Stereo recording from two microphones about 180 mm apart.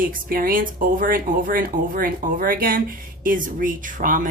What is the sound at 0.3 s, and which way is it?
Speech, 55° right (ahead or behind).